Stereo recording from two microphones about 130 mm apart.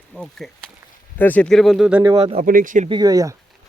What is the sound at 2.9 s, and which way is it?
Speech, 30° right (ahead or behind).